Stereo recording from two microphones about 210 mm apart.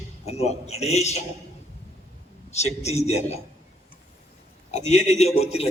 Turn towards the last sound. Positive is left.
turn(degrees=30)  # may be behind; listen again after turning